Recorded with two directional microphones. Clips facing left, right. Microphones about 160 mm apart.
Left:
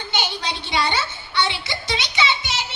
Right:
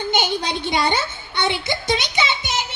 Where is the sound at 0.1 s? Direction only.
50° right (ahead or behind).